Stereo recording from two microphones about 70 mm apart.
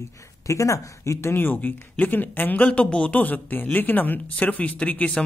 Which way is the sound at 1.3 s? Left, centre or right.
Left.